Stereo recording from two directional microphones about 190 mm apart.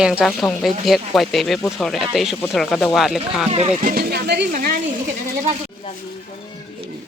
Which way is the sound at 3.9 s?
55° right (ahead or behind).